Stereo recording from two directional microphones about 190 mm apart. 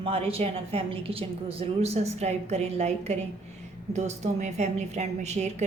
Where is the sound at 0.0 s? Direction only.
30° right (ahead or behind).